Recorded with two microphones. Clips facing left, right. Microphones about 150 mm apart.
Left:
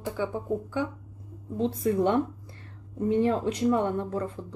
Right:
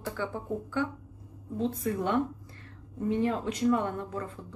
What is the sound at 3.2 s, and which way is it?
Speech, 30° left (ahead or behind).